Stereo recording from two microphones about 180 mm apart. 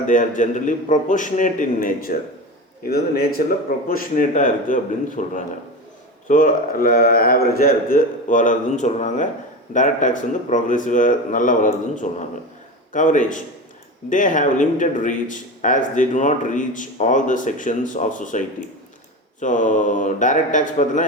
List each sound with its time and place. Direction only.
0.0 s a man's voice: 45° left (ahead or behind)